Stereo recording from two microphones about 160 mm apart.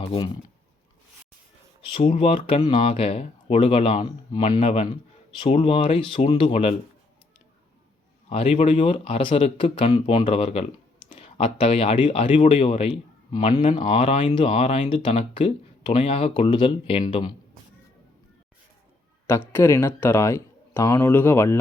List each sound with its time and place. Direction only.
0.0 s speech: 30° left (ahead or behind)
1.9 s speech: 35° left (ahead or behind)
4.0 s a man's voice: 25° left (ahead or behind)
4.6 s speech: 40° left (ahead or behind)
8.3 s a man's voice: 40° left (ahead or behind)
19.5 s speech: 15° left (ahead or behind)